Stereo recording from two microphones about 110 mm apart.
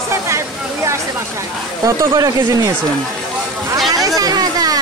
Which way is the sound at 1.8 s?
30° right (ahead or behind).